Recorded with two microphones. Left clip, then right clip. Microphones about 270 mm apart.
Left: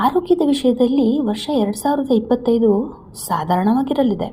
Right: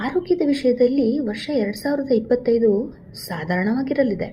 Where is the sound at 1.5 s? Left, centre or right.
Left.